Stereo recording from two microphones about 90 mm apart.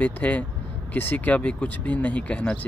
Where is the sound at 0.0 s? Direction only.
15° left (ahead or behind).